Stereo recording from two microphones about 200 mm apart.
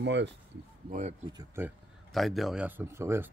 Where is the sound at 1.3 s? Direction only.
20° right (ahead or behind).